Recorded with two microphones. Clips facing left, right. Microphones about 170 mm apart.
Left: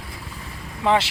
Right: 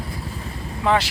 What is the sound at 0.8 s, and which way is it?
Speech, 20° left (ahead or behind).